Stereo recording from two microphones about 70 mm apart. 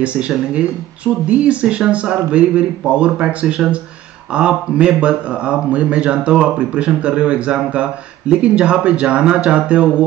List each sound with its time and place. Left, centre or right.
0.0 s speech: centre